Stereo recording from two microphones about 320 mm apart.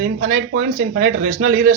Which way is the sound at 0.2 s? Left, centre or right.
Right.